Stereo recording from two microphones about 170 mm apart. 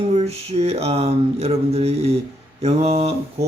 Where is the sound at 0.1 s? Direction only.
40° right (ahead or behind).